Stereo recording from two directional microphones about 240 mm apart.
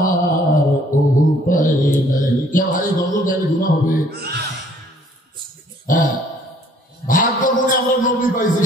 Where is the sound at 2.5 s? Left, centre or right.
Left.